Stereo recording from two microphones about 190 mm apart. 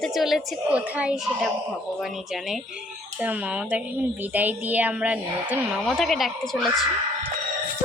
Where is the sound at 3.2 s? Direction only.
5° right (ahead or behind).